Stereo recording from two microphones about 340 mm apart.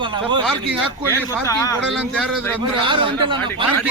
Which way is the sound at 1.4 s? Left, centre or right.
Centre.